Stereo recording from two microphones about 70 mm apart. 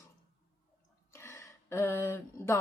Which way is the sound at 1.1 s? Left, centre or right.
Left.